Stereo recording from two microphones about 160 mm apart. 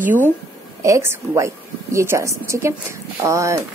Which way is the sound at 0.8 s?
20° right (ahead or behind).